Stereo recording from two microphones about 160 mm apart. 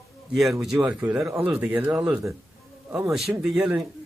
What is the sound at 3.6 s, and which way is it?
Speech, 15° right (ahead or behind).